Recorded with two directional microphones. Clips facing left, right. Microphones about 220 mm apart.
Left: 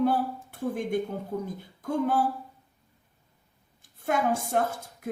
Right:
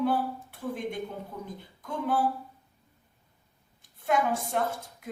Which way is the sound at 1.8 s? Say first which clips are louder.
Left 4 dB; 45° left (ahead or behind).